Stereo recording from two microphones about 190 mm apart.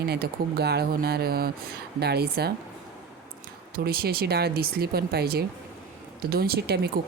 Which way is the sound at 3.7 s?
50° right (ahead or behind).